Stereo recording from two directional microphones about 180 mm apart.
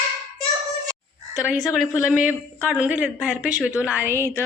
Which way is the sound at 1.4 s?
5° right (ahead or behind).